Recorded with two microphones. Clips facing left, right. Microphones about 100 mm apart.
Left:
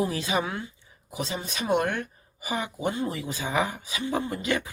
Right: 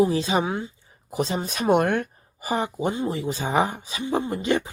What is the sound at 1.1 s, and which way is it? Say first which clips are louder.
Speech: right 6 dB; 45° right (ahead or behind).